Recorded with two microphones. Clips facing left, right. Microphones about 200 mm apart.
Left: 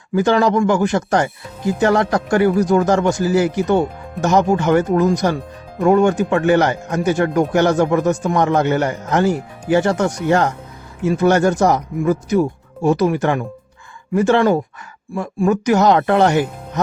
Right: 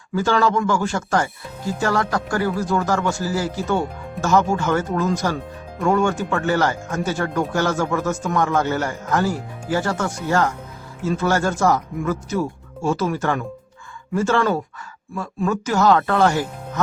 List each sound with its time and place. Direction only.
0.1 s speech: 20° left (ahead or behind)